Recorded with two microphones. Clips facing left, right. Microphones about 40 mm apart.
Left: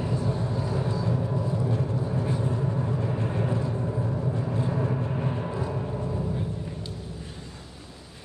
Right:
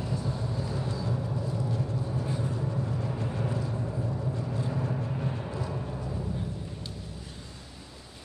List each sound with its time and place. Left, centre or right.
0.0 s vehicle: left